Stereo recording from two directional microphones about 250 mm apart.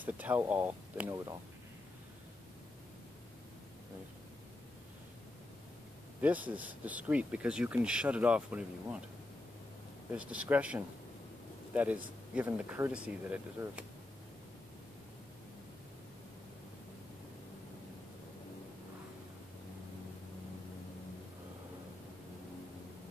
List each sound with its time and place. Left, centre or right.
0.0 s speech: centre
6.2 s speech: centre
10.1 s speech: centre